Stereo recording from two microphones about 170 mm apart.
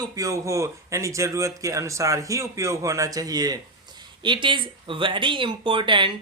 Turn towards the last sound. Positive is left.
turn(degrees=-30)  # may be behind; listen again after turning